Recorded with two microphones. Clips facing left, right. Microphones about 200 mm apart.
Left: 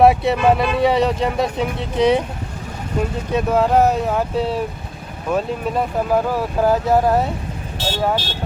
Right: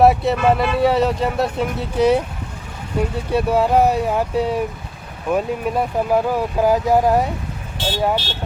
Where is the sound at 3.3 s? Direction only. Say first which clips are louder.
Even; 10° right (ahead or behind).